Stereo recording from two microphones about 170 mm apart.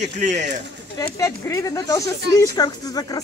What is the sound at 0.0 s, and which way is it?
Speech, 45° right (ahead or behind).